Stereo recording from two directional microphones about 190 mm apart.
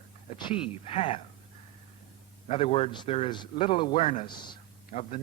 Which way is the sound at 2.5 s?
30° left (ahead or behind).